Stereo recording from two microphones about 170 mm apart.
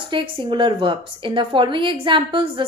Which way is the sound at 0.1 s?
30° right (ahead or behind).